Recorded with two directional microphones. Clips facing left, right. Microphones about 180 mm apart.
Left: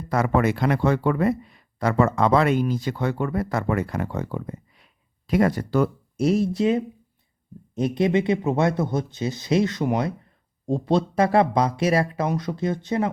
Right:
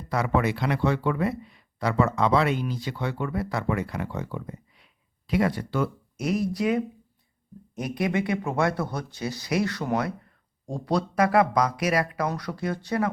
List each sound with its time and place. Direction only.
0.1 s speech: 45° left (ahead or behind); by 13.1 s 20° left (ahead or behind)